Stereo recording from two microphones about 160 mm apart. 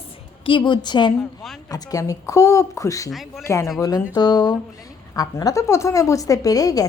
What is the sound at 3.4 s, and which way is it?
A woman's voice, 15° left (ahead or behind).